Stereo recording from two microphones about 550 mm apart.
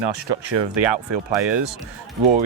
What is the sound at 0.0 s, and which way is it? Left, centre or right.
Speech, right.